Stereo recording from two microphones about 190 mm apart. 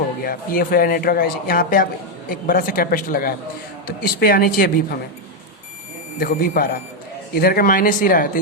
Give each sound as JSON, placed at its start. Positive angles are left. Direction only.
{"t": 0.3, "sound": "speech", "side_deg": 50}
{"t": 6.1, "sound": "speech", "side_deg": 45}